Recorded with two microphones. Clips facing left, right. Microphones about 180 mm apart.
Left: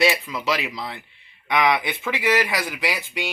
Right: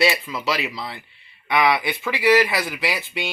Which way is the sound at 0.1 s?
Centre (ahead or behind).